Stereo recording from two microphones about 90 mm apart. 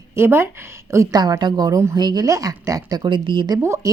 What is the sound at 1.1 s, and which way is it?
Speech, 45° right (ahead or behind).